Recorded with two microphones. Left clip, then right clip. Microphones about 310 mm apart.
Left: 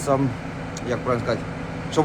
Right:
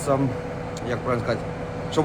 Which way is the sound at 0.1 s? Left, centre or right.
Centre.